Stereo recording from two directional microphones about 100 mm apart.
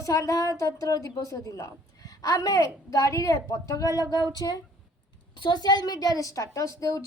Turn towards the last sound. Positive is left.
turn(degrees=35)  # may be behind; listen again after turning